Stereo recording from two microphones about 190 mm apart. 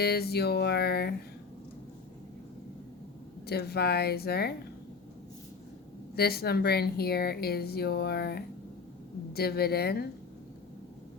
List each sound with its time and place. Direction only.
0.0 s speech: 55° left (ahead or behind)
3.4 s speech: 55° left (ahead or behind)
6.1 s speech: 55° left (ahead or behind)